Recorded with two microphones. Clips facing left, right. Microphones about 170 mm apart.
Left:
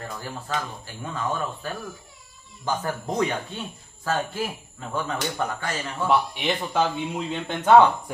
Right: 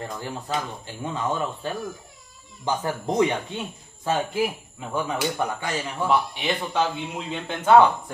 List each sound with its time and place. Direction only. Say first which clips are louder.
0.0 s speech: right 2 dB; 20° right (ahead or behind)
6.0 s a man's voice: left 1 dB; 5° left (ahead or behind)
7.4 s a man's voice: even; 5° right (ahead or behind)